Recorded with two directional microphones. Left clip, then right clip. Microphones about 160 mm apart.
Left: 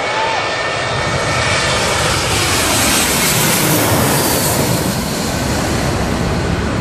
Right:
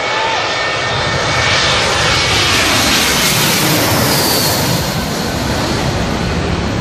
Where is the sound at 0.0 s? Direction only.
5° left (ahead or behind).